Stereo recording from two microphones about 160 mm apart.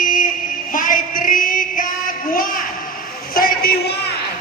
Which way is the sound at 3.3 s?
70° left (ahead or behind).